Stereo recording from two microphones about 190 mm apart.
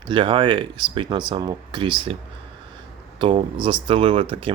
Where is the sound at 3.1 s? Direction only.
25° right (ahead or behind).